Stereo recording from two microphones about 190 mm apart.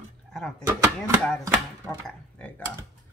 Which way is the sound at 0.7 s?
15° right (ahead or behind).